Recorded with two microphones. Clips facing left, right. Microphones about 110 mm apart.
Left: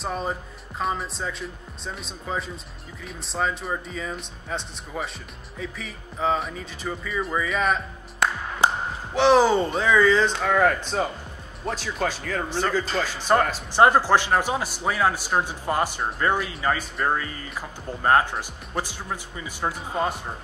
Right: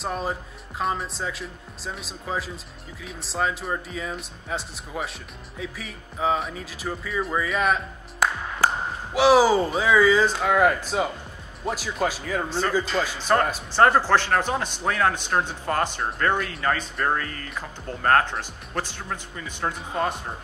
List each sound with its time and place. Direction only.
0.0 s speech: centre (ahead or behind)
12.4 s speech: 15° left (ahead or behind)
12.9 s speech: 15° right (ahead or behind)
13.7 s speech: 10° left (ahead or behind)